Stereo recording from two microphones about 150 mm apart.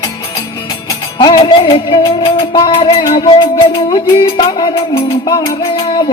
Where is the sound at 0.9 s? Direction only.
30° left (ahead or behind).